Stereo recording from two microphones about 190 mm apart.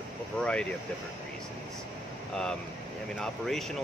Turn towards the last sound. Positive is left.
turn(degrees=0)  # may be behind; listen again after turning